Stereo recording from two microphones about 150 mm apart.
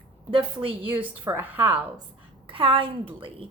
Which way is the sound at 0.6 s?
35° right (ahead or behind).